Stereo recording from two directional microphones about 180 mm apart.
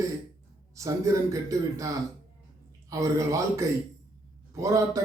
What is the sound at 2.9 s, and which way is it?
A man's voice, 15° right (ahead or behind).